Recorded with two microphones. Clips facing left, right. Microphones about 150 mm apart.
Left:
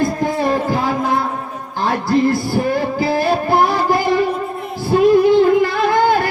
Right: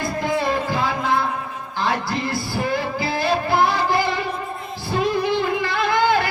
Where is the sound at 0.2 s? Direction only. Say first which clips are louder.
Left 4 dB; 45° left (ahead or behind).